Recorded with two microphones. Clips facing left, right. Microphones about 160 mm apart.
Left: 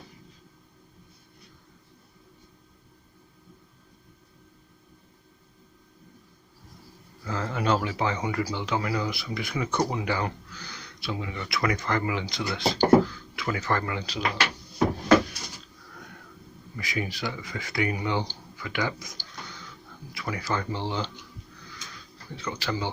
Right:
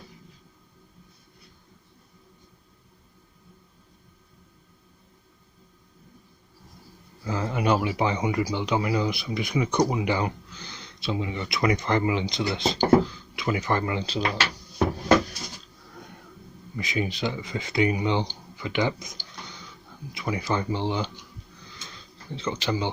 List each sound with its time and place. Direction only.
7.3 s speech: 15° right (ahead or behind)
16.7 s speech: 20° right (ahead or behind)
21.7 s a sound: 25° right (ahead or behind)